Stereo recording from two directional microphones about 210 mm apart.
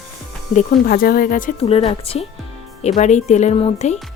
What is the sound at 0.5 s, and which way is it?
Speech, 45° left (ahead or behind).